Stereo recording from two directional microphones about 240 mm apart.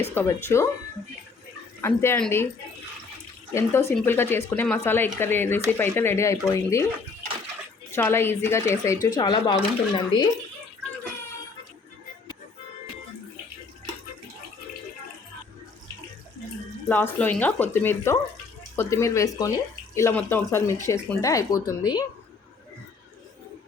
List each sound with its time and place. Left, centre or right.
0.1 s speech: centre
1.8 s speech: centre
3.5 s speech: centre
7.9 s speech: centre
16.9 s speech: centre